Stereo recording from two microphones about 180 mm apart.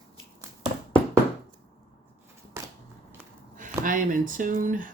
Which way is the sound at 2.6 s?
15° right (ahead or behind).